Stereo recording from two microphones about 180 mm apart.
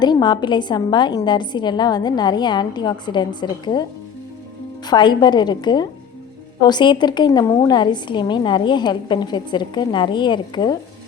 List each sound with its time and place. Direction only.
0.0 s a woman's voice: 25° left (ahead or behind)
4.9 s a woman's voice: 25° left (ahead or behind)